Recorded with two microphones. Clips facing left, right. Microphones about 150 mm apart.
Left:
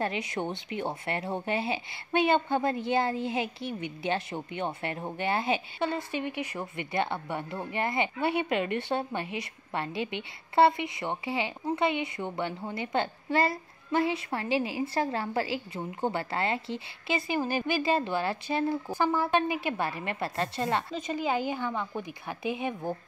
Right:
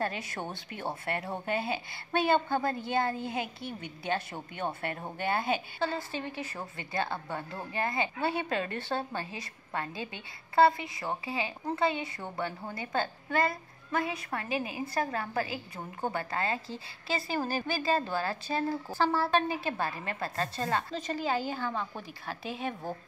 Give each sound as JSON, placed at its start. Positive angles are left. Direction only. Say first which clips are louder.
{"t": 0.0, "sound": "a child's voice", "louder": "left 3 dB", "side_deg": 20}